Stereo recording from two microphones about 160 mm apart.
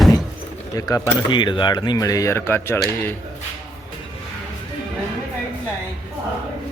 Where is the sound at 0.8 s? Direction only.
20° left (ahead or behind).